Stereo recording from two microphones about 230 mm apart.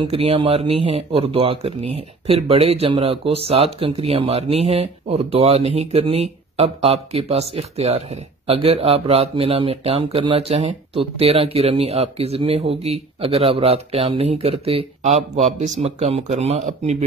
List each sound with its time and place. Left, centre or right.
0.0 s speech: right